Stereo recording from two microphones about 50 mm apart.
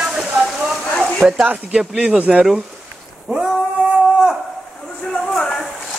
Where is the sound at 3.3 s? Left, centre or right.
Centre.